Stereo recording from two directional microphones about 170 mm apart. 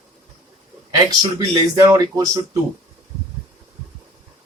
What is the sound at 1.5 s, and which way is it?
Speech, 20° right (ahead or behind).